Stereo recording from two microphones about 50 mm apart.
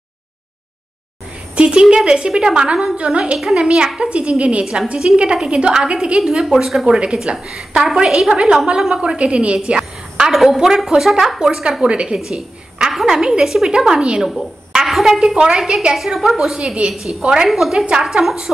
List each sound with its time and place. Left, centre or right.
1.5 s a woman's voice: right
3.0 s a woman's voice: right
6.2 s a woman's voice: centre
6.9 s a woman's voice: right
7.3 s a woman's voice: centre
10.3 s a woman's voice: centre
14.9 s a woman's voice: centre
16.5 s a woman's voice: centre
16.9 s a woman's voice: centre
17.2 s a woman's voice: centre
17.5 s a woman's voice: centre